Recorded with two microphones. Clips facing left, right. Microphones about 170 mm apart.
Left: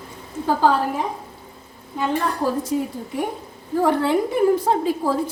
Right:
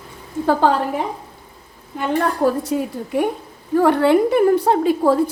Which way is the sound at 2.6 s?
65° right (ahead or behind).